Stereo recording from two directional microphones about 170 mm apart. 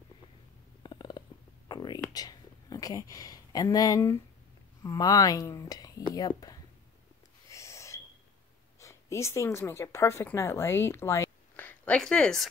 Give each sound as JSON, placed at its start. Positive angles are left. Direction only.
{"t": 0.8, "sound": "stomach rumble", "side_deg": 25}
{"t": 1.7, "sound": "a sound", "side_deg": 25}
{"t": 4.8, "sound": "speech", "side_deg": 20}
{"t": 7.4, "sound": "owl", "side_deg": 15}
{"t": 8.7, "sound": "speech", "side_deg": 15}